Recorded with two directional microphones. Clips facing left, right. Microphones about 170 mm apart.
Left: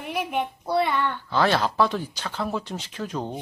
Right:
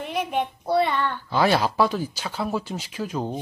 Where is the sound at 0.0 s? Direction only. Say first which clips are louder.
Right 1 dB; 5° left (ahead or behind).